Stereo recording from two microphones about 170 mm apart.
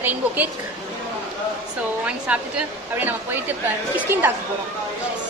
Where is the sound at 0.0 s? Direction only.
10° right (ahead or behind).